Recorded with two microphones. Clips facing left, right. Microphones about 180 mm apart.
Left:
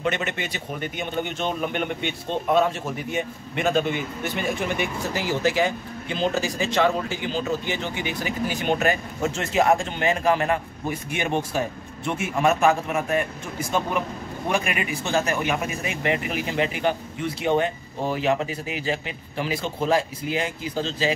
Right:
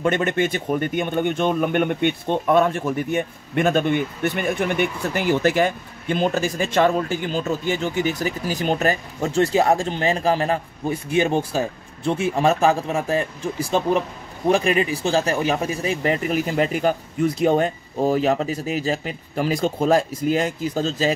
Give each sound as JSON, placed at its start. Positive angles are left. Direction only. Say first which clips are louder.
{"t": 0.0, "sound": "speech", "louder": "right 7 dB", "side_deg": -50}